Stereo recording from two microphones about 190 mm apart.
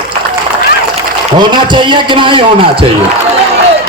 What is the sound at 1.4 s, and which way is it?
Music, 25° right (ahead or behind).